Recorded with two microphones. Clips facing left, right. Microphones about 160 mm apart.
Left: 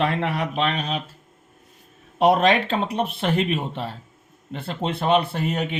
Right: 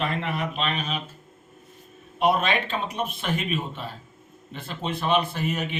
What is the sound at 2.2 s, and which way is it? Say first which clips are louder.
Speech: left 5 dB; 75° left (ahead or behind).